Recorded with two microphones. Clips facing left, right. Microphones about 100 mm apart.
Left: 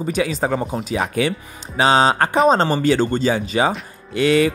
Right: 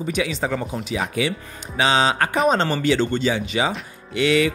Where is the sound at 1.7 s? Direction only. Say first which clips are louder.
Left 4 dB; 40° left (ahead or behind).